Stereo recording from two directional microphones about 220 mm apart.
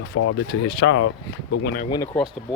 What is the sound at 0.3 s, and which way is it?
Speech, 60° left (ahead or behind).